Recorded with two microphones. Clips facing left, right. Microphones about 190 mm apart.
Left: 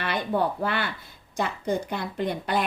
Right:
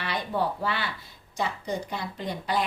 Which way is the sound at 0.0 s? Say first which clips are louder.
Left 3 dB; 55° left (ahead or behind).